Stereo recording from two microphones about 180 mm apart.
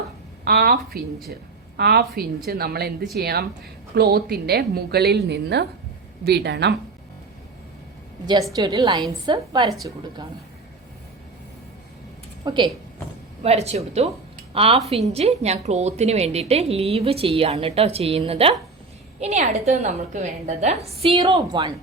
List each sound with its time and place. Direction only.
0.4 s a woman's voice: 55° right (ahead or behind)
8.5 s a woman's voice: 20° right (ahead or behind)
12.5 s a woman's voice: 25° right (ahead or behind)
21.2 s a woman's voice: 25° right (ahead or behind)